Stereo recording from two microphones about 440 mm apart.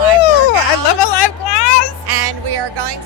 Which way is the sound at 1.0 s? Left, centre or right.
Left.